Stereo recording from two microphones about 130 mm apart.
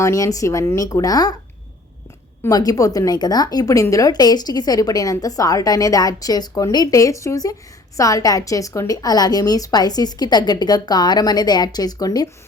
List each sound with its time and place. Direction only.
0.0 s speech: 25° left (ahead or behind)
2.4 s a woman's voice: 30° left (ahead or behind)